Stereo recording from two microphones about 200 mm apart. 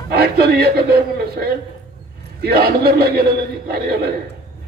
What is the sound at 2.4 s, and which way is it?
Speech, 50° right (ahead or behind).